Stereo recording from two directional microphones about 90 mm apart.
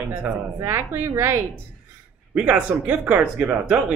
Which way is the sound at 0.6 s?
30° right (ahead or behind).